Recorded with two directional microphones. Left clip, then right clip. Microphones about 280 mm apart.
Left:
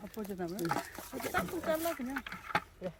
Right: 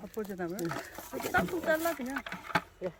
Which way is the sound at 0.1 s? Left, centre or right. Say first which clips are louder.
Right 4 dB; centre.